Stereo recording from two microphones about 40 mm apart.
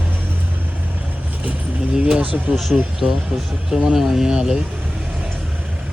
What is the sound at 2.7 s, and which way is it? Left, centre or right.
Speech, right.